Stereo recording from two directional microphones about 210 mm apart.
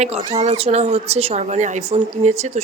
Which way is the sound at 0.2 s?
30° right (ahead or behind).